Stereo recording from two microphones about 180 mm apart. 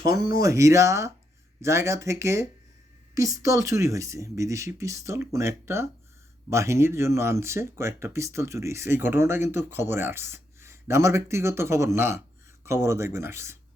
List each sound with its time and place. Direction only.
0.0 s speech: 55° left (ahead or behind)
0.3 s speech: 15° right (ahead or behind)